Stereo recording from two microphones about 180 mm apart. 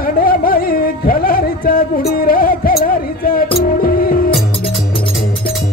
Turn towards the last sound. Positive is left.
turn(degrees=55)  # may be behind; listen again after turning